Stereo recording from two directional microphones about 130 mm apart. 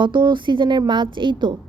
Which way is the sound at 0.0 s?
35° right (ahead or behind).